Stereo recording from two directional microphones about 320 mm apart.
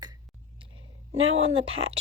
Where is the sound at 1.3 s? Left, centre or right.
Centre.